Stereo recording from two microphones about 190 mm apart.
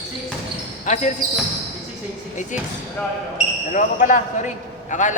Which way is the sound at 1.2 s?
45° right (ahead or behind).